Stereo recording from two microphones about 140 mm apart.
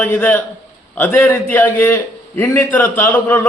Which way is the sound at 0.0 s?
10° left (ahead or behind).